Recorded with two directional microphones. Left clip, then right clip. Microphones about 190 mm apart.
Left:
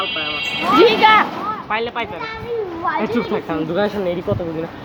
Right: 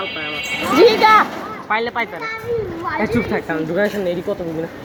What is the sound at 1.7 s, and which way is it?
Speech, 35° right (ahead or behind).